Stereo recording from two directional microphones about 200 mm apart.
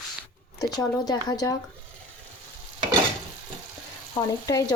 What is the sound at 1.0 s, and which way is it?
Speech, 20° left (ahead or behind).